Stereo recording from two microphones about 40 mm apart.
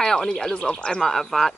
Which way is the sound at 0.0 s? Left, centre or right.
Centre.